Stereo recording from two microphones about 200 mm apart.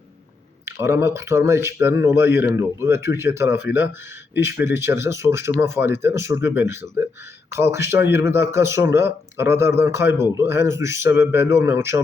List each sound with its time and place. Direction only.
0.6 s speech: 10° right (ahead or behind)